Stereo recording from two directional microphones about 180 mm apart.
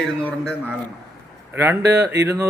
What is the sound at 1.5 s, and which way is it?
Speech, 10° right (ahead or behind).